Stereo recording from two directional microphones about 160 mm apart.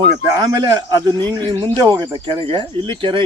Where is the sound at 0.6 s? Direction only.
25° right (ahead or behind).